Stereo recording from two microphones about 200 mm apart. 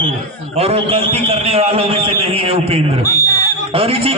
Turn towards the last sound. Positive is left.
turn(degrees=-30)  # may be behind; listen again after turning